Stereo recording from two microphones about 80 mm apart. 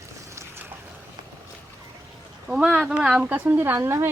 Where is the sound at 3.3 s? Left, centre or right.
Right.